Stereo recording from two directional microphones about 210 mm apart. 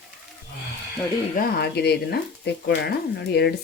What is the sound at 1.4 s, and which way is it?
Speech, 50° left (ahead or behind).